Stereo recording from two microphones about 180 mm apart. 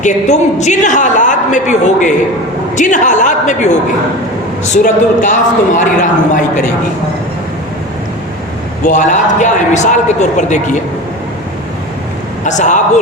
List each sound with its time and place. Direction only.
0.0 s a woman's voice: 40° left (ahead or behind)
8.8 s a woman's voice: 45° left (ahead or behind)
12.5 s a woman's voice: 40° left (ahead or behind)